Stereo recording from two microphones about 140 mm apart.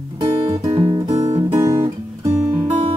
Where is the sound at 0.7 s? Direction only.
35° right (ahead or behind).